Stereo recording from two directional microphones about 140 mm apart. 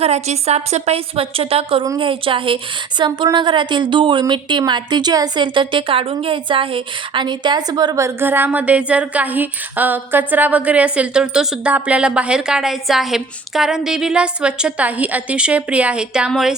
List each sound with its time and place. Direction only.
0.0 s a woman's voice: 50° right (ahead or behind); by 16.6 s 5° right (ahead or behind)